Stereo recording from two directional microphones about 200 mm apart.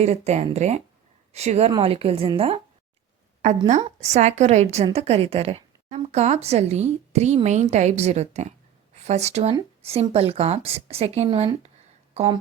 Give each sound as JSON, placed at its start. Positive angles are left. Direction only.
{"t": 0.0, "sound": "a woman's voice", "side_deg": -35}
{"t": 3.7, "sound": "a woman's voice", "side_deg": -35}